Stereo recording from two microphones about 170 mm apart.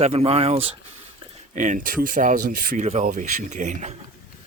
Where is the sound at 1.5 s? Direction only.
45° right (ahead or behind).